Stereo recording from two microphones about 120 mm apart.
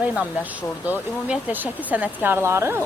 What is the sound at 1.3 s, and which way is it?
Speech, 15° right (ahead or behind).